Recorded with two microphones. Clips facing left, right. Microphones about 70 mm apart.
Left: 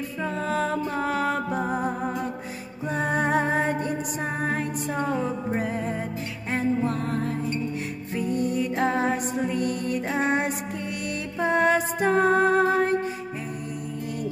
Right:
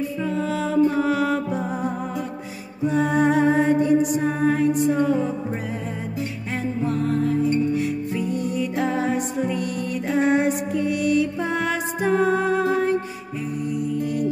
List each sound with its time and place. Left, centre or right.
0.4 s music: left
2.9 s music: left
6.9 s music: left